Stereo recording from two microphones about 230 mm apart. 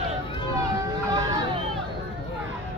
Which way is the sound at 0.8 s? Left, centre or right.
Centre.